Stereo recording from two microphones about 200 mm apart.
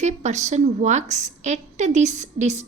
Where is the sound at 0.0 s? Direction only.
35° right (ahead or behind).